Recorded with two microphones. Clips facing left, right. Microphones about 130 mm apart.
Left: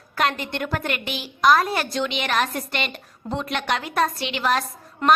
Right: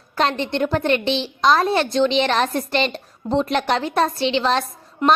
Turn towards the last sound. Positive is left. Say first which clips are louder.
# right 1 dB
turn(degrees=-15)  # may be behind; listen again after turning